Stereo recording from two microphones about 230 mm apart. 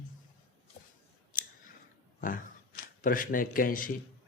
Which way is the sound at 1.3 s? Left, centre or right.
Left.